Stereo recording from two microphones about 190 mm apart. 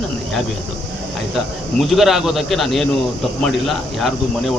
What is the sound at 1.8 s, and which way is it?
Speech, centre (ahead or behind).